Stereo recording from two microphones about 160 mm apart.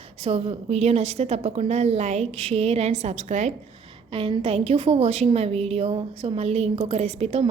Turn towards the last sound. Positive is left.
turn(degrees=-40)  # may be behind; listen again after turning